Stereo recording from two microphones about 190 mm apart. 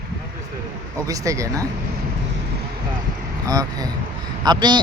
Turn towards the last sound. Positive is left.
turn(degrees=-25)  # may be behind; listen again after turning